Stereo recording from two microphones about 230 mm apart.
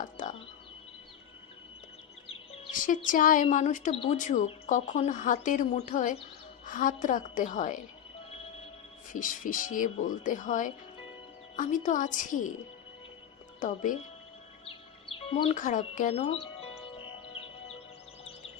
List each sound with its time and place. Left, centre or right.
0.0 s music: left
2.7 s speech: left
9.1 s speech: left
13.6 s speech: left
14.7 s speech: left
16.4 s music: left